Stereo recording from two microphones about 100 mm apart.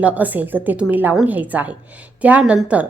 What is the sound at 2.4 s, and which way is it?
Speech, centre (ahead or behind).